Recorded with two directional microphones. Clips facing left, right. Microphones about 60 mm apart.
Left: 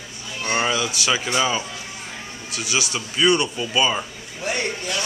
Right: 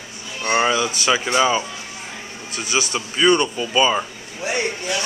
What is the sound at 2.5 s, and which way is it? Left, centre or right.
Speech, right.